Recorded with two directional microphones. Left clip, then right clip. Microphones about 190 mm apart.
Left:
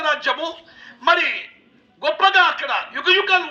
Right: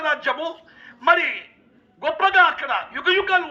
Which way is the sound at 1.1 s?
25° right (ahead or behind).